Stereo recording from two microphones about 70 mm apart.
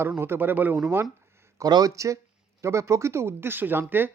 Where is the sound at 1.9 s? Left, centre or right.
Right.